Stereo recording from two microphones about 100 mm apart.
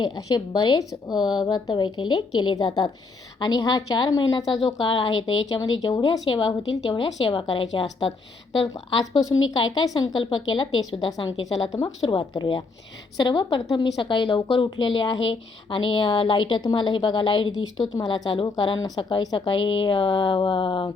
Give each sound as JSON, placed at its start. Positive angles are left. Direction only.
{"t": 0.3, "sound": "a woman's voice", "side_deg": 50}
{"t": 4.9, "sound": "a woman's voice", "side_deg": 55}
{"t": 5.5, "sound": "a woman's voice", "side_deg": 40}